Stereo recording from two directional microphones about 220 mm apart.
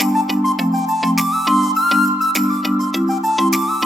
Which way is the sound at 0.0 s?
Centre (ahead or behind).